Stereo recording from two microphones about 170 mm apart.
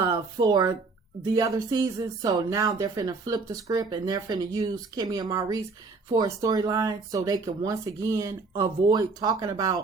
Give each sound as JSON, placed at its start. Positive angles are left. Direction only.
{"t": 0.0, "sound": "speech", "side_deg": -25}